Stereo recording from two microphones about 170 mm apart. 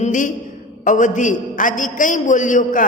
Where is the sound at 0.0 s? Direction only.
50° left (ahead or behind).